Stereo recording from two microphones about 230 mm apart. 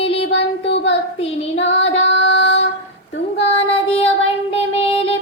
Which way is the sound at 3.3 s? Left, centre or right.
Left.